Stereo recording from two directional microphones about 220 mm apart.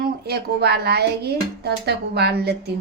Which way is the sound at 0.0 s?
45° right (ahead or behind).